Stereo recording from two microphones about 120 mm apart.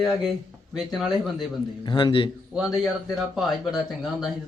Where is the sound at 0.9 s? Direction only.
Centre (ahead or behind).